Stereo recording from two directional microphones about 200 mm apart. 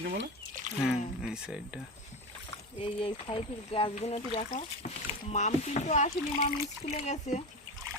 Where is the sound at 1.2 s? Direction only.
5° right (ahead or behind).